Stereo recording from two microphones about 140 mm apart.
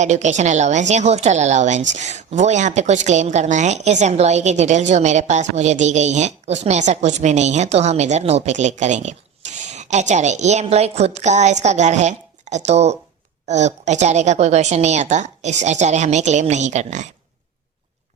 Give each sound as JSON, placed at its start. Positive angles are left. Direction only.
{"t": 0.0, "sound": "speech", "side_deg": -55}